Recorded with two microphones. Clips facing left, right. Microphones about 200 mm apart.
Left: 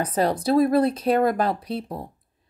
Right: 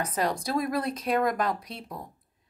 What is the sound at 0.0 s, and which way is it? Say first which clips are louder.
A woman's voice: left 6 dB; 30° left (ahead or behind).